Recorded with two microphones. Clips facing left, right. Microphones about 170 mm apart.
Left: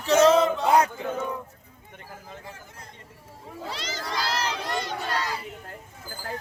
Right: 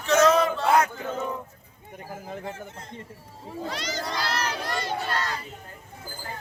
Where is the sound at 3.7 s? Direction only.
25° left (ahead or behind).